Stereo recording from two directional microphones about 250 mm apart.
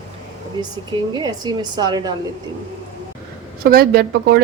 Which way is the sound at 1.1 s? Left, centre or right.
Centre.